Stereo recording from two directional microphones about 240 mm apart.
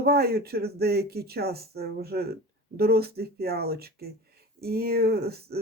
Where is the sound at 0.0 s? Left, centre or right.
Right.